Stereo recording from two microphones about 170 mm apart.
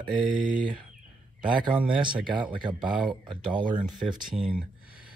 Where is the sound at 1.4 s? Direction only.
30° right (ahead or behind).